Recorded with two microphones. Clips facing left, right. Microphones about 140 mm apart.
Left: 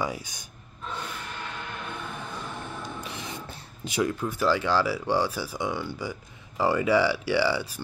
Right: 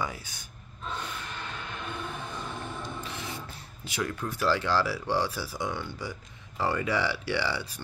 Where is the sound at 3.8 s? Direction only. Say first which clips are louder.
Left 6 dB; 15° left (ahead or behind).